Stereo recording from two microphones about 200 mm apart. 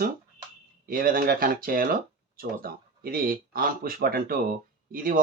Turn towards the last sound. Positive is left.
turn(degrees=-45)  # may be behind; listen again after turning